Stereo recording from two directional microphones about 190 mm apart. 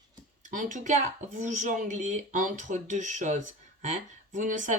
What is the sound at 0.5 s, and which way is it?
Speech, 40° right (ahead or behind).